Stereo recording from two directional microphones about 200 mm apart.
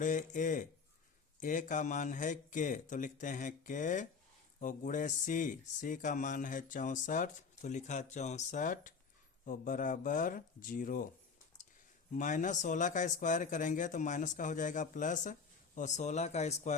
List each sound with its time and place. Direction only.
0.0 s speech: 40° left (ahead or behind)
12.1 s speech: 40° left (ahead or behind)